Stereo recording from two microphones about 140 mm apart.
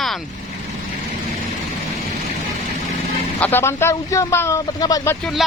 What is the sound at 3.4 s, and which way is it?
Speech, 15° left (ahead or behind).